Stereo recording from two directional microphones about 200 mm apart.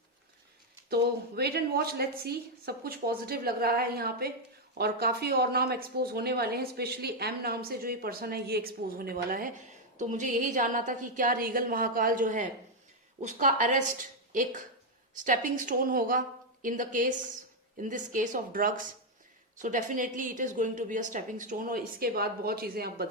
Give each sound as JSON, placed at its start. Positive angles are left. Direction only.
{"t": 1.4, "sound": "a woman's voice", "side_deg": -50}
{"t": 15.2, "sound": "a woman's voice", "side_deg": -40}